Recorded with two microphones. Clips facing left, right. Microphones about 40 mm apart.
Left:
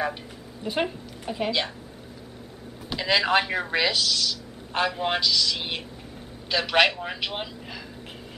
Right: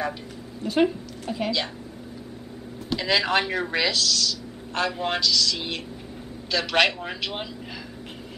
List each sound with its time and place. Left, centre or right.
0.6 s speech: centre
2.9 s speech: centre